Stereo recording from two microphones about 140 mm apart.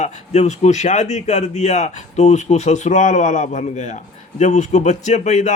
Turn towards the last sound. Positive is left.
turn(degrees=55)  # may be behind; listen again after turning